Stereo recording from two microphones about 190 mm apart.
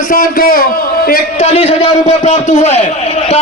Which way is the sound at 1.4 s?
35° left (ahead or behind).